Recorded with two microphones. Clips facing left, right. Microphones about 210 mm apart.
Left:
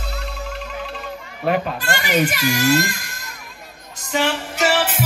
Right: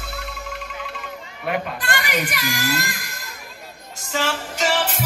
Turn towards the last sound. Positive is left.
turn(degrees=5)  # may be behind; listen again after turning